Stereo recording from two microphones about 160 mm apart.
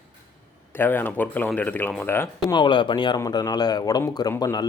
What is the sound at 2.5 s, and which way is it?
A man's voice, 30° left (ahead or behind).